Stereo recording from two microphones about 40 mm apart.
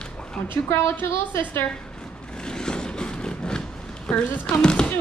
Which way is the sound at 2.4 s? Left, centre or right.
Centre.